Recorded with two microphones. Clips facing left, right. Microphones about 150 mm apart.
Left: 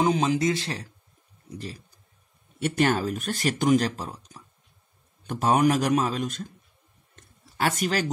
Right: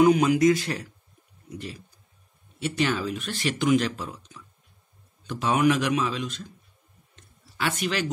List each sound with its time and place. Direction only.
0.0 s speech: 25° left (ahead or behind)
2.6 s speech: 50° left (ahead or behind)
7.2 s a sound: 45° left (ahead or behind)